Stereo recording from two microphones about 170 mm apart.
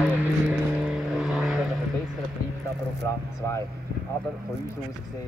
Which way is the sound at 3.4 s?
15° left (ahead or behind).